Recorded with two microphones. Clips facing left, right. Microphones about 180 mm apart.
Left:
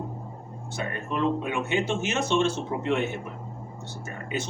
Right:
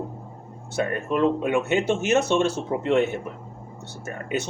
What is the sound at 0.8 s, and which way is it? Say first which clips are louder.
Speech: right 6 dB; 50° right (ahead or behind).